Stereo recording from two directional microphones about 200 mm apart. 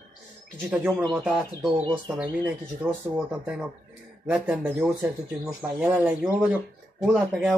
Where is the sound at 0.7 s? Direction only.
5° right (ahead or behind).